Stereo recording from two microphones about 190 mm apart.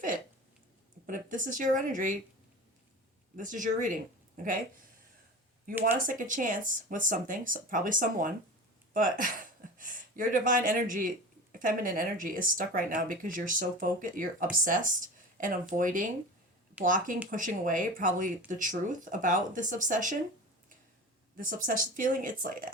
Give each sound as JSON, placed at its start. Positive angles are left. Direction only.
{"t": 1.0, "sound": "speech", "side_deg": -45}
{"t": 3.3, "sound": "speech", "side_deg": -45}
{"t": 6.1, "sound": "speech", "side_deg": -45}
{"t": 21.3, "sound": "speech", "side_deg": -45}